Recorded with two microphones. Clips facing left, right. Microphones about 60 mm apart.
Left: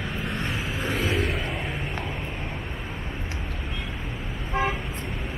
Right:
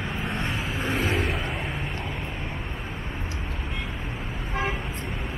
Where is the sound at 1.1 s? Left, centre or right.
Centre.